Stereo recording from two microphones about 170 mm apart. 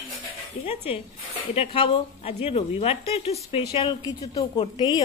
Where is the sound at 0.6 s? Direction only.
35° left (ahead or behind).